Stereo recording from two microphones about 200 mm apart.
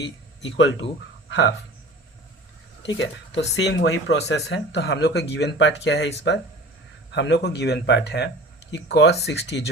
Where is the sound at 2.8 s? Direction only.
60° left (ahead or behind).